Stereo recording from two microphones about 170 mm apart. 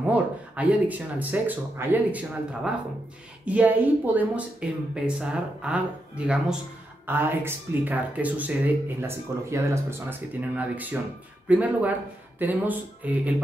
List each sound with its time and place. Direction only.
0.1 s speech: 10° right (ahead or behind)